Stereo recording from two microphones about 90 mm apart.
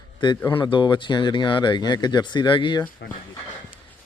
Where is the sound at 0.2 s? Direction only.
60° left (ahead or behind).